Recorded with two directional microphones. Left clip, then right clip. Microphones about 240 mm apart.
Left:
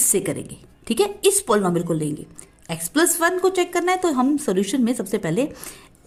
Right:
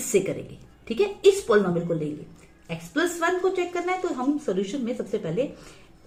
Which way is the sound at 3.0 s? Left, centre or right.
Left.